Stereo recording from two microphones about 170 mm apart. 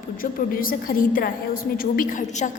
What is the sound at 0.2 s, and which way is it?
A woman's voice, 55° left (ahead or behind).